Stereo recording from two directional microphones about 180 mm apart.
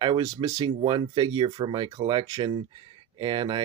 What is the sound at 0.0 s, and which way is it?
Speech, 25° right (ahead or behind).